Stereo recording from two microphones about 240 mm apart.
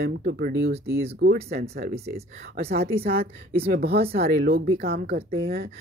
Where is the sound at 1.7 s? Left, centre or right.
Right.